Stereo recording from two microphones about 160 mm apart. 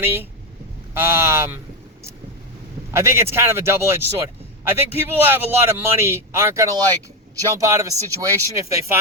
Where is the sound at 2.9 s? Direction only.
15° right (ahead or behind).